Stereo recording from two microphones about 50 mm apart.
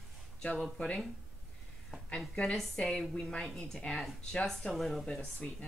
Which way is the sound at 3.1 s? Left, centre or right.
Centre.